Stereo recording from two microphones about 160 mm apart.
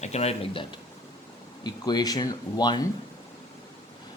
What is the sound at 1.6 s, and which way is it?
Speech, 25° left (ahead or behind).